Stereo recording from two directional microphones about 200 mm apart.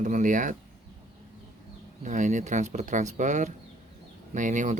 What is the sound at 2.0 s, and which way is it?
Speech, 40° right (ahead or behind).